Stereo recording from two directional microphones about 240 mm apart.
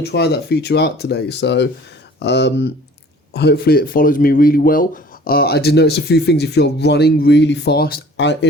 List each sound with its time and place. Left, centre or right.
0.0 s speech: left